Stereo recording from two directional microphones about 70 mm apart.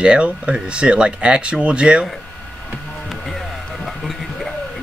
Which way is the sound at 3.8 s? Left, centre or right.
Centre.